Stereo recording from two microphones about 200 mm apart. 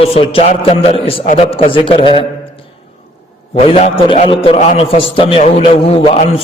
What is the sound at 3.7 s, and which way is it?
A man's voice, 30° left (ahead or behind).